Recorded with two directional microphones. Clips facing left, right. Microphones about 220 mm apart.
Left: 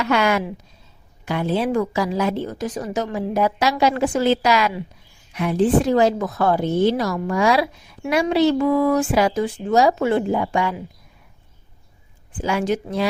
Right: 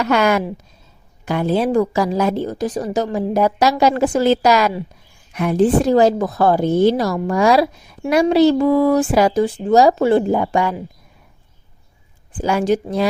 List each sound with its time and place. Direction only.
0.0 s a woman's voice: 45° right (ahead or behind)
12.4 s a woman's voice: 40° right (ahead or behind)